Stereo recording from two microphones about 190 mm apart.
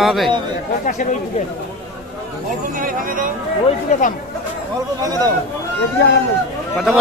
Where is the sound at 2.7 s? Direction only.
45° right (ahead or behind).